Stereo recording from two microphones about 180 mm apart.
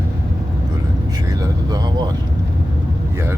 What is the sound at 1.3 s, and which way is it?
Vehicle, 20° right (ahead or behind).